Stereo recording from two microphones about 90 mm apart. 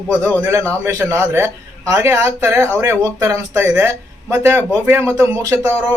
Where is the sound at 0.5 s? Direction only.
35° right (ahead or behind).